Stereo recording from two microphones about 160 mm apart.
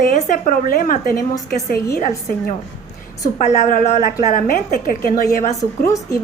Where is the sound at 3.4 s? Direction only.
50° left (ahead or behind).